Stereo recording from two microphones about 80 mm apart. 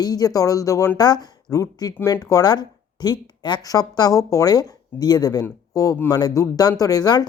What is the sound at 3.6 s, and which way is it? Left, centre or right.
Speech, left.